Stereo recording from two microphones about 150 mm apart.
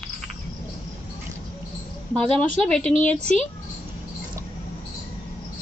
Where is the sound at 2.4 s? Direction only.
5° left (ahead or behind).